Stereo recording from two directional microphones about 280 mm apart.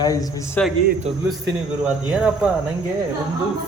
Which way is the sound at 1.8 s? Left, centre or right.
Centre.